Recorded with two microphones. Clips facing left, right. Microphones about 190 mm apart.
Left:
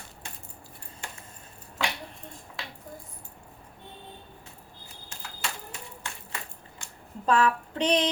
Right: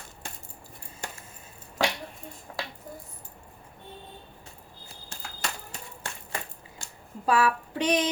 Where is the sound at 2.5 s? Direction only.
60° right (ahead or behind).